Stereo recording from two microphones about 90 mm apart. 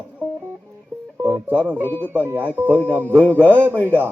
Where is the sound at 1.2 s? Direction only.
20° right (ahead or behind).